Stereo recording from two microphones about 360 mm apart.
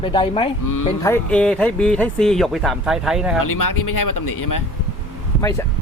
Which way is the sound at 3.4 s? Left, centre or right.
Left.